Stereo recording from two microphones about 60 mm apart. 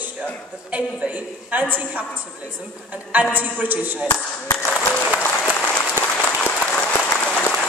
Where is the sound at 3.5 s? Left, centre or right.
Right.